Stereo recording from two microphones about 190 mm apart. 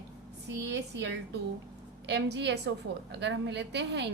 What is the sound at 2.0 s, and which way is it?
A woman's voice, 65° right (ahead or behind).